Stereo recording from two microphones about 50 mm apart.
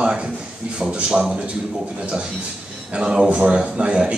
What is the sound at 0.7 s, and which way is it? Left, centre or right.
Speech, right.